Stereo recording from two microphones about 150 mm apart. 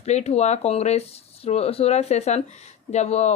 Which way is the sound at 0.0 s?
45° left (ahead or behind).